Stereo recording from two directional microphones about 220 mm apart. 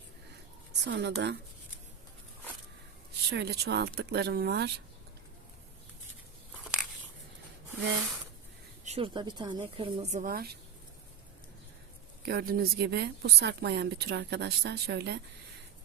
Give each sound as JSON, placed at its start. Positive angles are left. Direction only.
{"t": 0.7, "sound": "a woman's voice", "side_deg": -50}
{"t": 3.1, "sound": "a woman's voice", "side_deg": -50}
{"t": 8.8, "sound": "a woman's voice", "side_deg": -25}
{"t": 12.2, "sound": "a woman's voice", "side_deg": -45}